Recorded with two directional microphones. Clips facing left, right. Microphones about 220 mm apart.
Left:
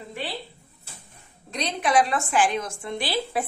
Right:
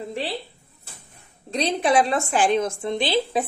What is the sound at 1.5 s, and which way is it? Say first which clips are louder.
A woman's voice: right 4 dB; 30° right (ahead or behind).